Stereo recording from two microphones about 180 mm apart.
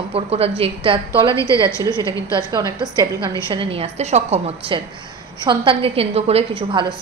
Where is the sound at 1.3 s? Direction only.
15° left (ahead or behind).